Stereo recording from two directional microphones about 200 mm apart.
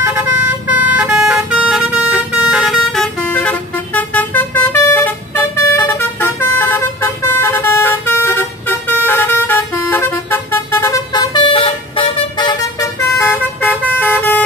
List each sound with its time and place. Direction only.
0.0 s vehicle: 10° right (ahead or behind); by 12.5 s 25° left (ahead or behind)
13.9 s vehicle: 10° left (ahead or behind)